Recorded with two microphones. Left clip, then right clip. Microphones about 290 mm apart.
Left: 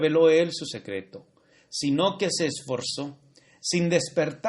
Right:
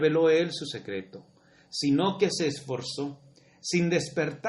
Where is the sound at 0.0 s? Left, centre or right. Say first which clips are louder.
Left 3 dB; left.